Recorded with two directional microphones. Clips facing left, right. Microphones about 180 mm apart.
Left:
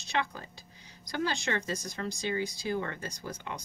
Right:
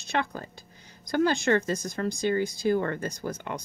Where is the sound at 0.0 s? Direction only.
50° right (ahead or behind).